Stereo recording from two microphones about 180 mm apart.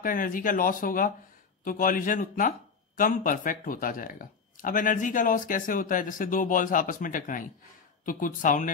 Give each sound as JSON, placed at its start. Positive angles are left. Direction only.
{"t": 0.0, "sound": "speech", "side_deg": 50}